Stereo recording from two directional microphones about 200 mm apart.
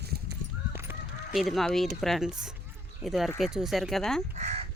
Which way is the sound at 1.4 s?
Centre (ahead or behind).